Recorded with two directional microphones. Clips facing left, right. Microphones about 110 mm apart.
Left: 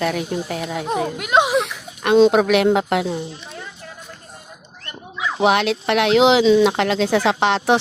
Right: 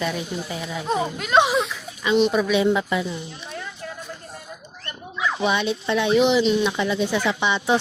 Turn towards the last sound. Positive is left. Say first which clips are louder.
# left 5 dB
turn(degrees=90)